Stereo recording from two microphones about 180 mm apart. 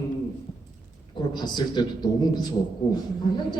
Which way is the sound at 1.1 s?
25° left (ahead or behind).